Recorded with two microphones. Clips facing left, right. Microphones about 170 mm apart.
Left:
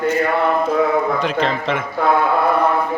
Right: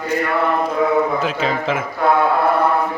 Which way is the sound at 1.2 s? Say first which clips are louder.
Left 1 dB; 5° right (ahead or behind).